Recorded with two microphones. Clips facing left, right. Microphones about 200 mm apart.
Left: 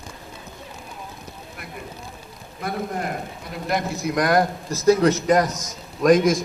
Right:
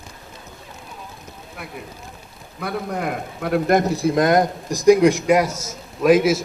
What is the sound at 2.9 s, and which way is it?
A man's voice, 85° right.